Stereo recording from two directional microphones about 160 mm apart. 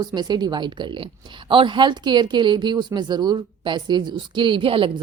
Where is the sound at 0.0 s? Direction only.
25° right (ahead or behind).